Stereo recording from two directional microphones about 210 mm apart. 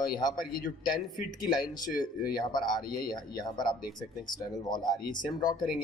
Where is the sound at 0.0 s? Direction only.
20° left (ahead or behind).